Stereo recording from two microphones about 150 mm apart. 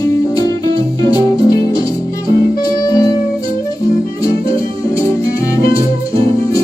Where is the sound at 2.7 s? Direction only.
25° left (ahead or behind).